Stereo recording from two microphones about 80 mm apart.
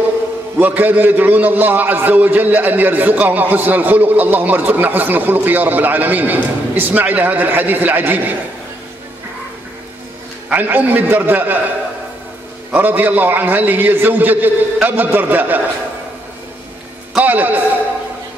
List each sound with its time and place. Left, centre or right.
0.6 s a man's voice: right
10.5 s a man's voice: right
12.7 s a man's voice: right
17.2 s a man's voice: right